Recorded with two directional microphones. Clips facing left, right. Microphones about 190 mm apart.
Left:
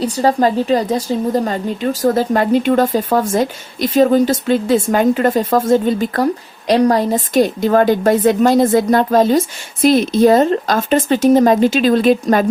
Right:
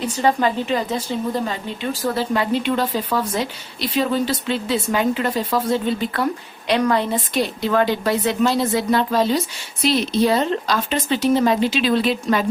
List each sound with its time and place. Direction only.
0.0 s a woman's voice: 35° left (ahead or behind)